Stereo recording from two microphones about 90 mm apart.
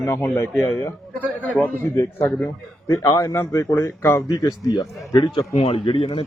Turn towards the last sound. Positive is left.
turn(degrees=90)